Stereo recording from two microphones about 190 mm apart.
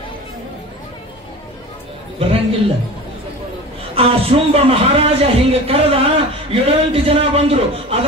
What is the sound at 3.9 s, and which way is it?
A man's voice, 30° right (ahead or behind).